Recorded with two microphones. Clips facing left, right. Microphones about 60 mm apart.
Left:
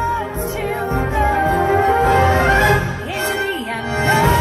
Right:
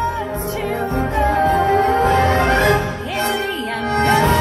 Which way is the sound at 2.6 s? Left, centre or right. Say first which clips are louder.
Even; right.